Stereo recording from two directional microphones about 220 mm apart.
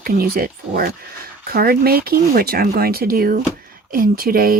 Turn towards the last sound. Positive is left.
turn(degrees=-40)  # may be behind; listen again after turning